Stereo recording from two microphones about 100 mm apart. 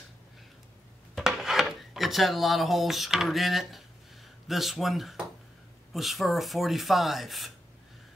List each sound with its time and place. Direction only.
1.1 s speech: 5° right (ahead or behind)